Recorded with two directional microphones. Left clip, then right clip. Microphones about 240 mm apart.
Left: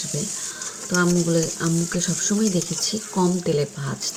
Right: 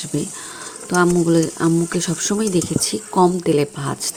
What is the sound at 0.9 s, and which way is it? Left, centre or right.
Speech, right.